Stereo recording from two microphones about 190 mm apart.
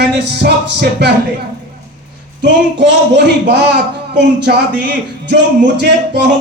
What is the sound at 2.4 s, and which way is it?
Speech, 65° right (ahead or behind).